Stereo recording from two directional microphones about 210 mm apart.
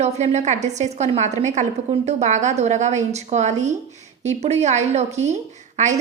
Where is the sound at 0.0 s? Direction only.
35° right (ahead or behind).